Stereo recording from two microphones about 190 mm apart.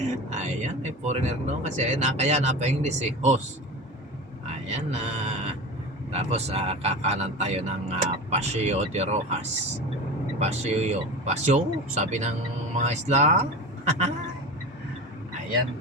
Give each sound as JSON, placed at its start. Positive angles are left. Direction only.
{"t": 0.3, "sound": "a man's voice", "side_deg": -40}
{"t": 4.7, "sound": "a man's voice", "side_deg": -35}